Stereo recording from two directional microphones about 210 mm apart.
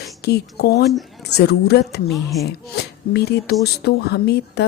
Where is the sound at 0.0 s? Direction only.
50° left (ahead or behind).